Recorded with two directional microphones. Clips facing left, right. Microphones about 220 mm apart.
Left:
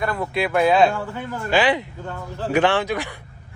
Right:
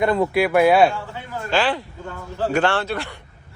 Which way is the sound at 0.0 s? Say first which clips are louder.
Right 6 dB; 25° right (ahead or behind).